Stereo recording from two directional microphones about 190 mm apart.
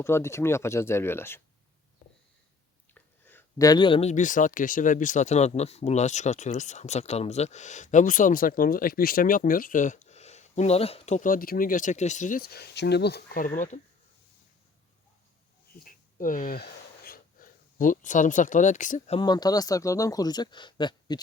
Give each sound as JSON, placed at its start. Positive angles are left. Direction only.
{"t": 0.0, "sound": "speech", "side_deg": 15}
{"t": 2.9, "sound": "a sound", "side_deg": 10}
{"t": 4.1, "sound": "speech", "side_deg": 40}
{"t": 15.8, "sound": "speech", "side_deg": 45}
{"t": 19.2, "sound": "speech", "side_deg": 20}